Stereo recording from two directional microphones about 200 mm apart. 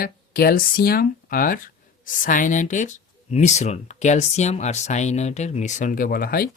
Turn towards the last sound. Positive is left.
turn(degrees=45)  # may be behind; listen again after turning